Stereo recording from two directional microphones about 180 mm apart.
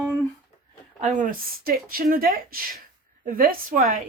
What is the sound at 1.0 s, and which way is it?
Speech, 50° right (ahead or behind).